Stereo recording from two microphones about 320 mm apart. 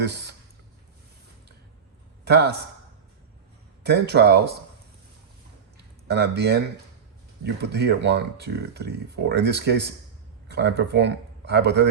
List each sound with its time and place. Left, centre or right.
0.0 s speech: right
2.2 s speech: right
3.8 s speech: right
5.7 s a sound: right
7.4 s speech: right